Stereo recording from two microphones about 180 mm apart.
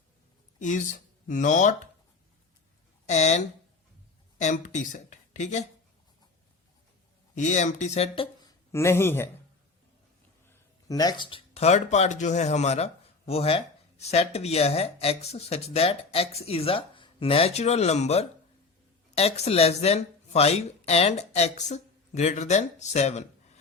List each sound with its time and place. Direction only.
0.6 s speech: 45° left (ahead or behind)
3.1 s speech: 40° left (ahead or behind)
7.3 s speech: 40° left (ahead or behind); by 9.3 s 15° left (ahead or behind)
10.5 s speech: 20° left (ahead or behind); by 23.2 s 40° left (ahead or behind)